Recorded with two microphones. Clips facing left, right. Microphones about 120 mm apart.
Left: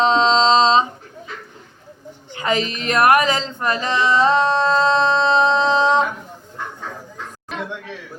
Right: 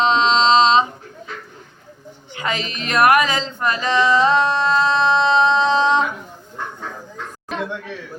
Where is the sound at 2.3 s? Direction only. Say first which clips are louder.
Left 4 dB; 30° left (ahead or behind).